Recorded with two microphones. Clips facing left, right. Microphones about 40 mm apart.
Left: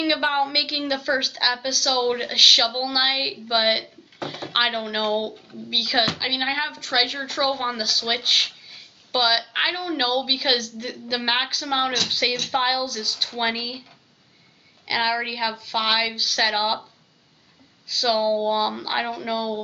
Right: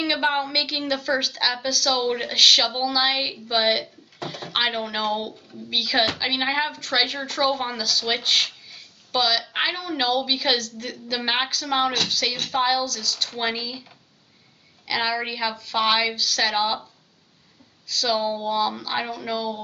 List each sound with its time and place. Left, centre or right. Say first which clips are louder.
0.0 s a woman's voice: left 1 dB; centre
3.8 s a sound: left 1 dB; centre
4.4 s a woman's voice: left 1 dB; centre
12.1 s a woman's voice: left 2 dB; centre
14.9 s a woman's voice: left 2 dB; centre
17.8 s a woman's voice: left 2 dB; centre